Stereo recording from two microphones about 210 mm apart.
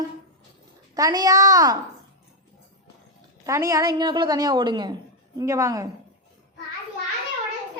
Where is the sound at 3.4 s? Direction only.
15° right (ahead or behind).